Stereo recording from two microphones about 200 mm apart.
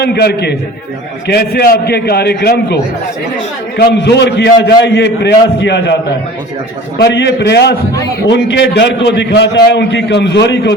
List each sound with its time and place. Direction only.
0.0 s a man's voice: 55° left (ahead or behind)
3.8 s a man's voice: 60° left (ahead or behind)
7.0 s a man's voice: 60° left (ahead or behind)